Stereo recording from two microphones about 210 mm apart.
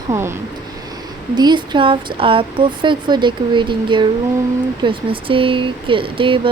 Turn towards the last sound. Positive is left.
turn(degrees=-25)  # may be behind; listen again after turning